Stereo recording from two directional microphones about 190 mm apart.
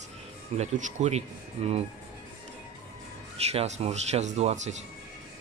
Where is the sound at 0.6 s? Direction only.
40° right (ahead or behind).